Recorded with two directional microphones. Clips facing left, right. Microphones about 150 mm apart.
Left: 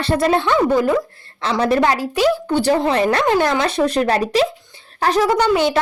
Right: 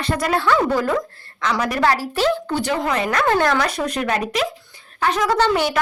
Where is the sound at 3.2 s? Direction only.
20° left (ahead or behind); by 5.2 s 35° left (ahead or behind).